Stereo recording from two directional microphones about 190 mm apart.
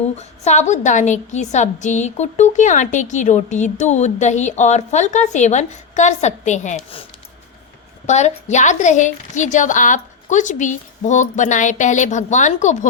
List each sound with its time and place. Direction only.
0.0 s a woman's voice: 35° left (ahead or behind)
8.0 s a woman's voice: 35° left (ahead or behind)